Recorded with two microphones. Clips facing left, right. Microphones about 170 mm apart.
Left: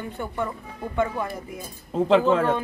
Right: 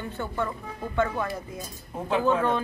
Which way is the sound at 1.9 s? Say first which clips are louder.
Left 9 dB; 90° left.